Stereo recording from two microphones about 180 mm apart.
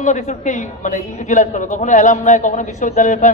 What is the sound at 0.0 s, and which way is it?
A man's voice, 45° left (ahead or behind).